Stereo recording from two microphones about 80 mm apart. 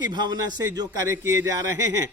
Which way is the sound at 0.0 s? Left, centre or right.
Right.